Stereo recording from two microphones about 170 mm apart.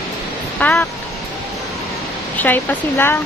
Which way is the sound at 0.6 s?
10° left (ahead or behind).